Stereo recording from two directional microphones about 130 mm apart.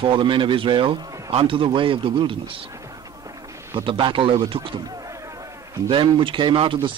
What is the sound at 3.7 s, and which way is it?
Speech, 40° right (ahead or behind).